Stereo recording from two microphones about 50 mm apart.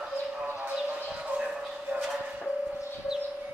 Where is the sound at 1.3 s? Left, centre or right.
Right.